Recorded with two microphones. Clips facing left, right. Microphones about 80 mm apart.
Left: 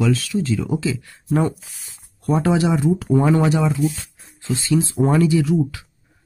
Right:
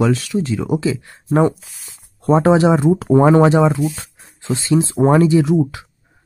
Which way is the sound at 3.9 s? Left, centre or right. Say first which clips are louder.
Right 3 dB; right.